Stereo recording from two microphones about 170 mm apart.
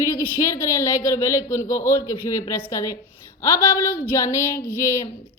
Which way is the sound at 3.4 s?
15° left (ahead or behind).